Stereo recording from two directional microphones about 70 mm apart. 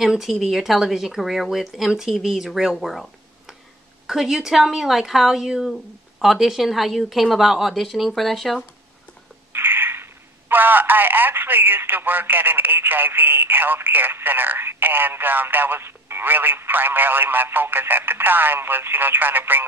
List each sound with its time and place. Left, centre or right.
0.0 s speech: centre
9.5 s speech: right